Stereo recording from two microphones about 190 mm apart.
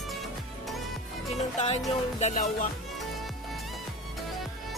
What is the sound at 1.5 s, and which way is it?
Music, 35° left (ahead or behind).